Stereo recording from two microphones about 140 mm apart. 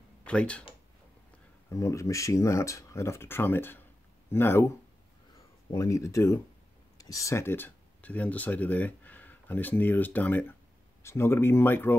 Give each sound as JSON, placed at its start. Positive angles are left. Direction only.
{"t": 0.2, "sound": "speech", "side_deg": 10}
{"t": 1.7, "sound": "speech", "side_deg": 20}